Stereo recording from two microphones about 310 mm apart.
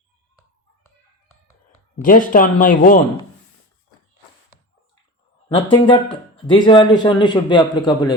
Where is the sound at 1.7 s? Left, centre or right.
Left.